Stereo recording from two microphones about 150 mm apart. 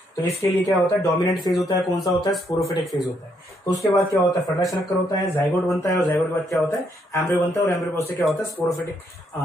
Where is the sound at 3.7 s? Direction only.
25° left (ahead or behind).